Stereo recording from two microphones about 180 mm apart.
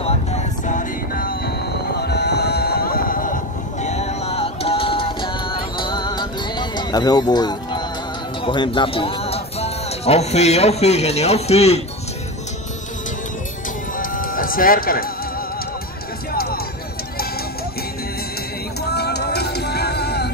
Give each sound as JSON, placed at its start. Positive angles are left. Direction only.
{"t": 0.7, "sound": "music", "side_deg": 50}
{"t": 2.0, "sound": "clip-clop", "side_deg": 65}
{"t": 3.8, "sound": "music", "side_deg": 35}
{"t": 8.5, "sound": "speech", "side_deg": 25}
{"t": 13.9, "sound": "music", "side_deg": 50}
{"t": 18.9, "sound": "a sound", "side_deg": 65}